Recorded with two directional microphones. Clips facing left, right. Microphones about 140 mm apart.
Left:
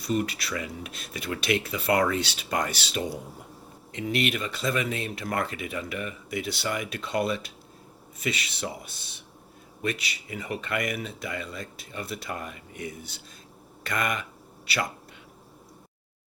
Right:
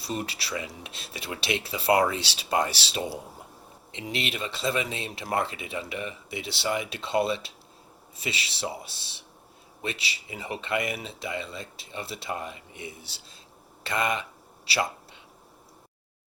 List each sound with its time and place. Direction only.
0.0 s speech: 30° right (ahead or behind)
4.3 s speech: 30° right (ahead or behind)